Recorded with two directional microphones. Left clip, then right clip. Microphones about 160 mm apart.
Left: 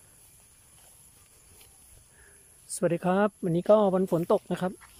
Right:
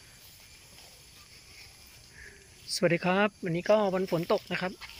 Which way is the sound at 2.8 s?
20° left (ahead or behind).